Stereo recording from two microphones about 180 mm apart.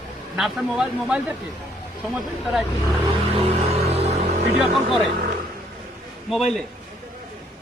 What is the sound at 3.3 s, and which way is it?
Music, 35° right (ahead or behind).